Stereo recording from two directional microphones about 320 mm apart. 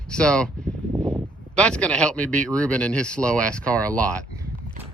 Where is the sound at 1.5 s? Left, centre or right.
Centre.